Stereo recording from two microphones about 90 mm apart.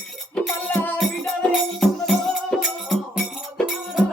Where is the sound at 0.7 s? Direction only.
20° left (ahead or behind).